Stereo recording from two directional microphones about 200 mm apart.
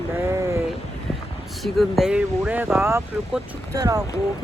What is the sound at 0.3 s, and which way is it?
Sheep, 15° right (ahead or behind).